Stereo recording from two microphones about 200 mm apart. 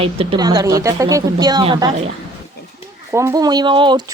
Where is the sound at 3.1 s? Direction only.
15° right (ahead or behind).